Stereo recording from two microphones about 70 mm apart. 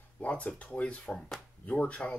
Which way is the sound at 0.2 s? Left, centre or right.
Centre.